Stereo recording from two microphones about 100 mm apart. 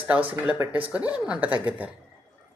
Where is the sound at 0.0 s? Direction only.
15° right (ahead or behind).